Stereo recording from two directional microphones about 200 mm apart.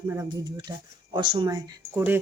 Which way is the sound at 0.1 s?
15° right (ahead or behind).